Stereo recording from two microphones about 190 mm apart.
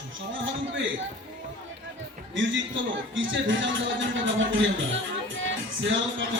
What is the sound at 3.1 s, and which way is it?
A man's voice, 85° right.